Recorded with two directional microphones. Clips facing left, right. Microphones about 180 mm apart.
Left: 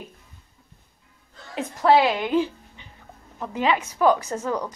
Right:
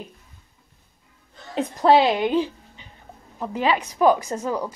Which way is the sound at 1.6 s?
20° right (ahead or behind).